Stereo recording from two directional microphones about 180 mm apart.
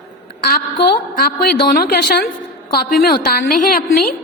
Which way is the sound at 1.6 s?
55° left (ahead or behind).